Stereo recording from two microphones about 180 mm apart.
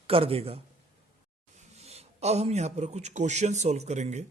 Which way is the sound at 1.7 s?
35° right (ahead or behind).